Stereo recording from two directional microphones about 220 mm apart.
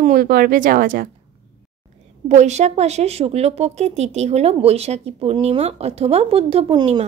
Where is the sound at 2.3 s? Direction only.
30° right (ahead or behind).